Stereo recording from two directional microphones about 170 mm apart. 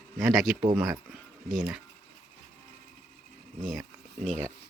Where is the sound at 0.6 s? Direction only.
25° right (ahead or behind).